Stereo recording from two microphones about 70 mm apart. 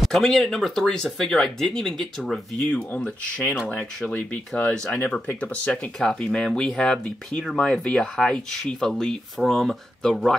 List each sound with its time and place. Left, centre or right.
0.0 s speech: centre